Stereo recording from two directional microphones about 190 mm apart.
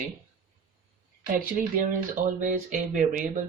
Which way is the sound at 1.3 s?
45° right (ahead or behind).